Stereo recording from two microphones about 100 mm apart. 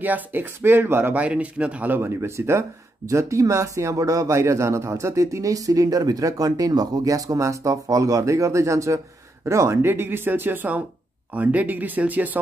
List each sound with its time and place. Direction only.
0.0 s speech: 20° right (ahead or behind)
1.2 s speech: 10° right (ahead or behind)